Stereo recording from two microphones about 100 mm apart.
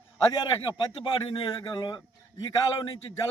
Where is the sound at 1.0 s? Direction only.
55° left (ahead or behind).